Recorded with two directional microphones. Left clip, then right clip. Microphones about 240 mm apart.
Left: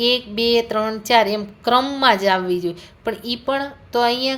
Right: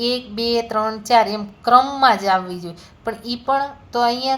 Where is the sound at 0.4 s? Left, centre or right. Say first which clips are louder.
Left 1 dB; left.